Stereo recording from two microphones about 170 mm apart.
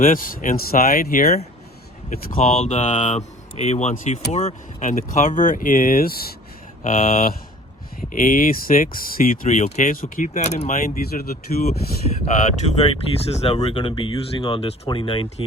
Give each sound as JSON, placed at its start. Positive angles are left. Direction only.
{"t": 0.0, "sound": "speech", "side_deg": 55}
{"t": 2.5, "sound": "speech", "side_deg": 40}
{"t": 6.8, "sound": "speech", "side_deg": 45}
{"t": 12.2, "sound": "speech", "side_deg": 40}